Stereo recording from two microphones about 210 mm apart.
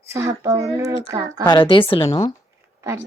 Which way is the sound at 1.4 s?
20° left (ahead or behind).